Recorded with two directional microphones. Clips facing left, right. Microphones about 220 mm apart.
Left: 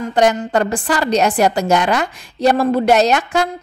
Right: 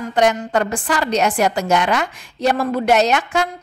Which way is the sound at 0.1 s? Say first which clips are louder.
Left 2 dB; 35° left (ahead or behind).